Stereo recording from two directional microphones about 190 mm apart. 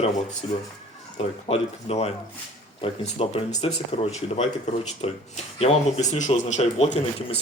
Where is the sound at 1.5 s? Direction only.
30° left (ahead or behind).